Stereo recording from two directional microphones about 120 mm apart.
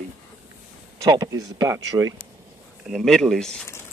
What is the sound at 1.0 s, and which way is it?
Speech, 35° right (ahead or behind).